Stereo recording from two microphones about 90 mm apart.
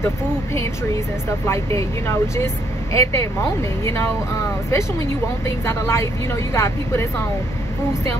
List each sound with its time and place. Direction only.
1.5 s speech: 30° left (ahead or behind)